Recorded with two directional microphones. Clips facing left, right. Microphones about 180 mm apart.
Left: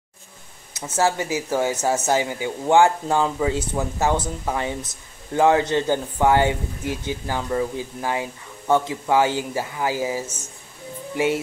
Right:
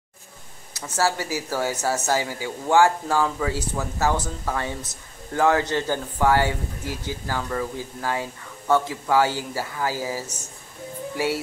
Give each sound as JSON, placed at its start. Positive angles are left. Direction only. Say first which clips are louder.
{"t": 0.7, "sound": "speech", "louder": "left 3 dB", "side_deg": 20}